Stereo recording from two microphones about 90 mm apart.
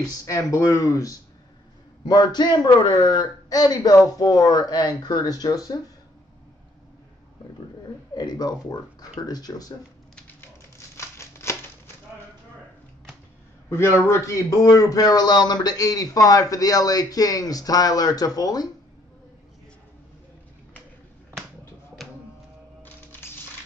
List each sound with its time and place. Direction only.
0.2 s speech: 35° left (ahead or behind)
2.0 s a man's voice: 55° left (ahead or behind)
8.1 s a sound: 50° left (ahead or behind)
8.6 s a man's voice: 45° left (ahead or behind)
11.0 s a sound: 30° left (ahead or behind)
14.0 s a man's voice: 35° left (ahead or behind)